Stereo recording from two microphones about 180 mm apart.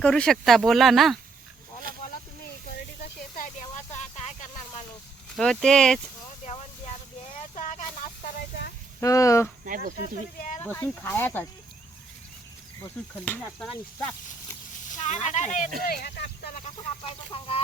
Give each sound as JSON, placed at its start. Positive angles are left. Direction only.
{"t": 0.0, "sound": "speech", "side_deg": 5}
{"t": 5.3, "sound": "speech", "side_deg": 5}
{"t": 7.5, "sound": "a sound", "side_deg": 45}
{"t": 9.0, "sound": "speech", "side_deg": 15}
{"t": 9.6, "sound": "speech", "side_deg": -50}
{"t": 10.6, "sound": "speech", "side_deg": 15}
{"t": 13.2, "sound": "speech", "side_deg": 10}
{"t": 14.9, "sound": "speech", "side_deg": 40}
{"t": 15.9, "sound": "speech", "side_deg": 60}